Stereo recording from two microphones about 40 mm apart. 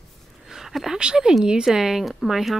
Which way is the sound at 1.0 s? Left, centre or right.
Centre.